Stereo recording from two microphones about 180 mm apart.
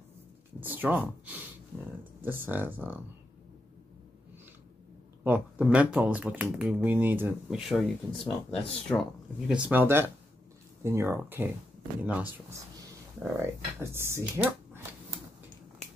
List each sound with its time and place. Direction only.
0.6 s speech: 10° right (ahead or behind)
5.2 s speech: 10° right (ahead or behind)
9.5 s speech: 10° right (ahead or behind)